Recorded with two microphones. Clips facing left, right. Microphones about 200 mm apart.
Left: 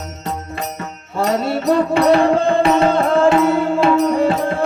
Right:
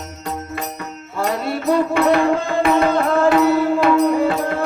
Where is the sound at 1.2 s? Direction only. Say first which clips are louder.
Left 3 dB; 25° left (ahead or behind).